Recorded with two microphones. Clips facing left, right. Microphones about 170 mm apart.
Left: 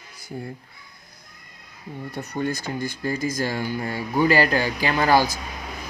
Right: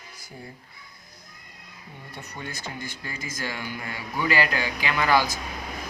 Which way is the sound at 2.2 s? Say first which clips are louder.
Left 11 dB; 40° left (ahead or behind).